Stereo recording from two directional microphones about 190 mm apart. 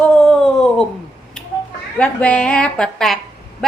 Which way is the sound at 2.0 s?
5° left (ahead or behind).